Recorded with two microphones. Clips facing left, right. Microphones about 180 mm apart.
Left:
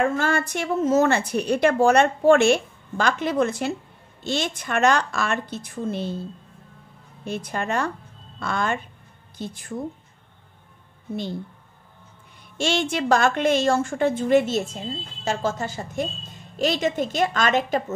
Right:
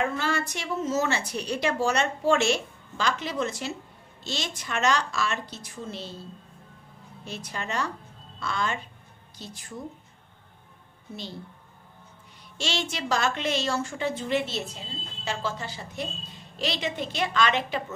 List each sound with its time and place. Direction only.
0.0 s a woman's voice: 50° left (ahead or behind)
7.2 s a woman's voice: 55° left (ahead or behind)
12.5 s a woman's voice: 50° left (ahead or behind)